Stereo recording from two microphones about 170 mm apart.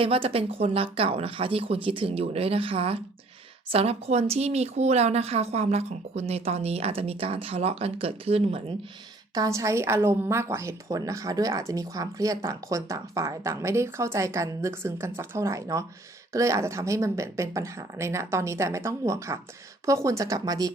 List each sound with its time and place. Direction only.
0.0 s speech: 35° right (ahead or behind)
9.3 s a woman's voice: 20° right (ahead or behind)